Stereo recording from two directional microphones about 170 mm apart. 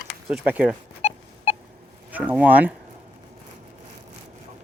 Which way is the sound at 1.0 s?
40° left (ahead or behind).